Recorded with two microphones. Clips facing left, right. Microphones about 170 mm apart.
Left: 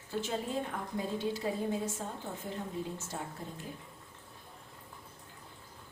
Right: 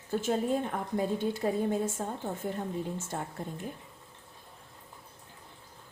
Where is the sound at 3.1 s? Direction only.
55° right (ahead or behind).